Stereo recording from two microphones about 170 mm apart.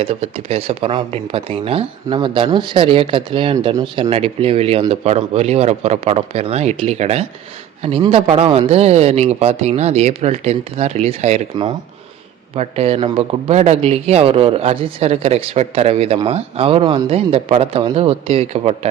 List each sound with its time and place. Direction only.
0.0 s a man's voice: 35° right (ahead or behind)
12.5 s a man's voice: 35° right (ahead or behind)